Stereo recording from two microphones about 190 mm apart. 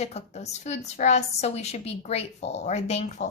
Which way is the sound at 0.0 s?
35° left (ahead or behind).